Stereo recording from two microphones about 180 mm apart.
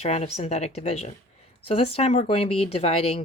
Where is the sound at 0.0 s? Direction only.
35° left (ahead or behind).